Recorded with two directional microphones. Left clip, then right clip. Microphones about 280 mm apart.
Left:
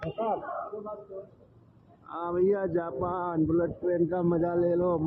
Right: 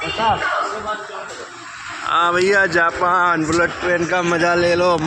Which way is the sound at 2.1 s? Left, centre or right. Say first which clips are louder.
Right 13 dB; right.